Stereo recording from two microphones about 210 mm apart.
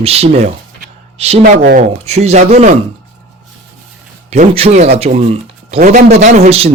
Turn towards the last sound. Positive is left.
turn(degrees=-30)  # may be behind; listen again after turning